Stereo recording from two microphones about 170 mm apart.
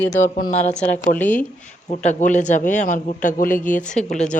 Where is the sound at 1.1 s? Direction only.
10° left (ahead or behind).